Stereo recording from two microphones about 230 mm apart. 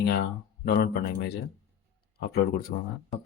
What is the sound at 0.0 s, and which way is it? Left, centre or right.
Speech, left.